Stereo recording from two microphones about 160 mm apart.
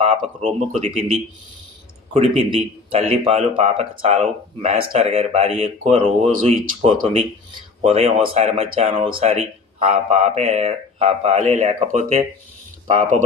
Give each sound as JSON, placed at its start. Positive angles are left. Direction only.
{"t": 0.0, "sound": "speech", "side_deg": -40}
{"t": 2.1, "sound": "speech", "side_deg": -35}